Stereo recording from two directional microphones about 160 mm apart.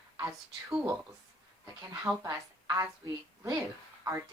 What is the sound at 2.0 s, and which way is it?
Speech, 20° right (ahead or behind).